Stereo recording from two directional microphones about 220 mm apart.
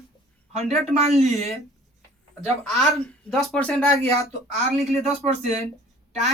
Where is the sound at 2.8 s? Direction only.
30° right (ahead or behind).